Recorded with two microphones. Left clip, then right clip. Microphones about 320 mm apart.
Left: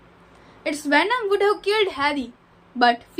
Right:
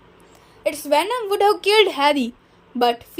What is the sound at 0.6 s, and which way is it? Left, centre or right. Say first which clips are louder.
Speech: right 1 dB; right.